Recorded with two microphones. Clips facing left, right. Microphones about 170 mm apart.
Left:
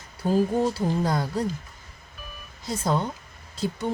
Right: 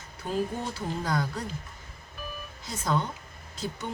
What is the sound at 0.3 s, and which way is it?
Speech, 35° left (ahead or behind).